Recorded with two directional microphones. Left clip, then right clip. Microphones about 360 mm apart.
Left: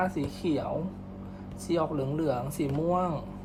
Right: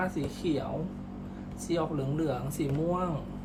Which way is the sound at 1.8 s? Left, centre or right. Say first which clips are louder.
Left 2 dB; centre.